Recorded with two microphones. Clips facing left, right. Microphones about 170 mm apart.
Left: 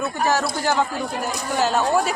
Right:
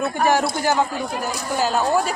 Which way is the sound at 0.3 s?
15° right (ahead or behind).